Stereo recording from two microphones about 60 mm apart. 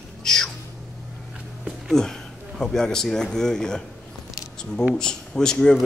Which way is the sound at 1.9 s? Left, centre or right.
Centre.